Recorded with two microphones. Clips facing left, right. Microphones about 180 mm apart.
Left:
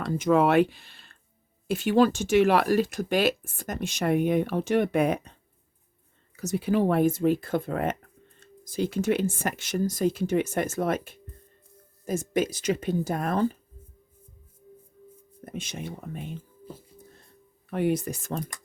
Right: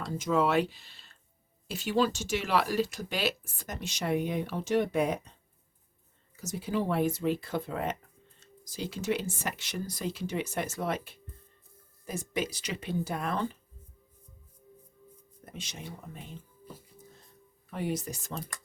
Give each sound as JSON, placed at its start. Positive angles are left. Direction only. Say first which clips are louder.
{"t": 0.0, "sound": "speech", "louder": "left 6 dB", "side_deg": 60}
{"t": 6.3, "sound": "speech", "louder": "left 7 dB", "side_deg": 65}
{"t": 15.5, "sound": "speech", "louder": "left 7 dB", "side_deg": 55}
{"t": 17.7, "sound": "speech", "louder": "left 8 dB", "side_deg": 60}